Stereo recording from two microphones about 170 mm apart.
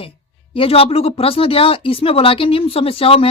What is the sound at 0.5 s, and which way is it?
A woman's voice, 35° left (ahead or behind).